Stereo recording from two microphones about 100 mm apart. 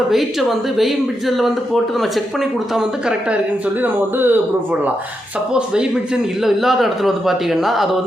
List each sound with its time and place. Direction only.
0.1 s speech: centre (ahead or behind)
3.8 s speech: 20° right (ahead or behind)
5.5 s speech: 10° right (ahead or behind)